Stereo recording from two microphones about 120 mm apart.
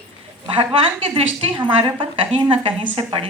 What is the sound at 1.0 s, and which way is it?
A woman's voice, 50° right (ahead or behind).